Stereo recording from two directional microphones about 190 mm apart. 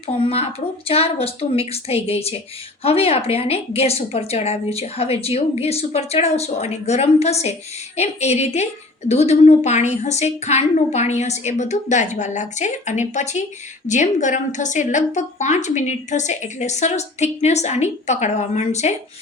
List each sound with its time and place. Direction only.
0.9 s a woman's voice: 30° left (ahead or behind)